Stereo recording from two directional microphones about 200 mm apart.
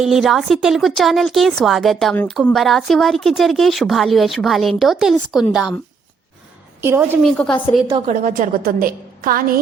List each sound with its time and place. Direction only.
0.0 s a woman's voice: centre (ahead or behind)
6.8 s a woman's voice: 10° right (ahead or behind)
7.2 s a woman's voice: 5° left (ahead or behind)
8.0 s a woman's voice: 40° right (ahead or behind)